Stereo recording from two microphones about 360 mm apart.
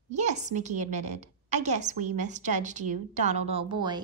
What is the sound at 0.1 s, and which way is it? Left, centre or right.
A woman's voice, centre.